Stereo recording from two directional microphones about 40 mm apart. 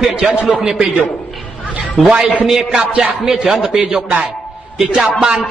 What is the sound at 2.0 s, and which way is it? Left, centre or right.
A man's voice, centre.